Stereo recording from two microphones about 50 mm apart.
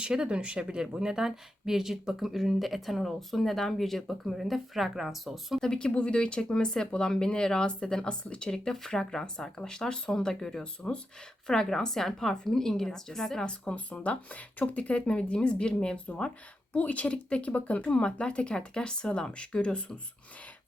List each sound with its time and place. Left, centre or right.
0.0 s a woman's voice: centre
5.5 s speech: centre
5.9 s speech: left
13.5 s speech: left